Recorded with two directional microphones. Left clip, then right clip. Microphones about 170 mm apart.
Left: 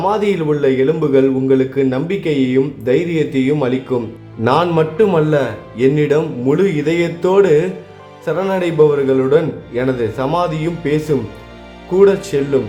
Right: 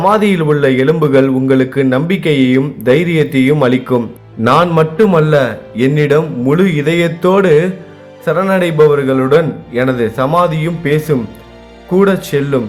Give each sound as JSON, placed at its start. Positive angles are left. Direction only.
{"t": 0.0, "sound": "a man's voice", "side_deg": -15}